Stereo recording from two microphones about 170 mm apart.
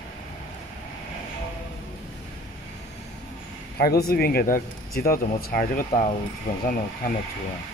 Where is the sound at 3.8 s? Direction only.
65° left (ahead or behind).